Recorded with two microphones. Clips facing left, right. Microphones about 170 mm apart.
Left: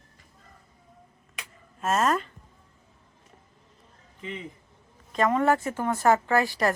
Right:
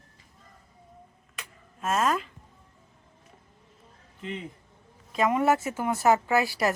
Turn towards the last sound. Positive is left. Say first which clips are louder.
# left 1 dB
turn(degrees=-10)  # may be behind; listen again after turning